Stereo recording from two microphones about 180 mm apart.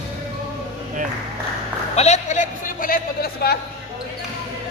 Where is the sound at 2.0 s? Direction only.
40° left (ahead or behind).